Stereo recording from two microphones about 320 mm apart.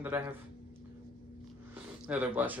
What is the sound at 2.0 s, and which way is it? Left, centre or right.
Speech, centre.